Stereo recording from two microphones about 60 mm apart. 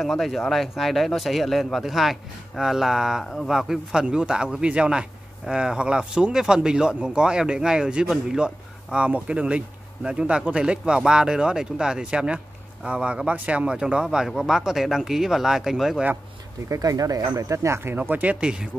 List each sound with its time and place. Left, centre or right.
0.0 s a man's voice: centre
14.1 s a man's voice: centre
16.6 s speech: right
17.9 s speech: right
18.4 s speech: centre